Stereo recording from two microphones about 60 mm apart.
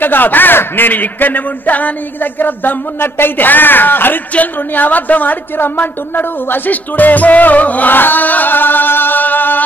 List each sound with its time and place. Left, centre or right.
0.0 s a man's voice: left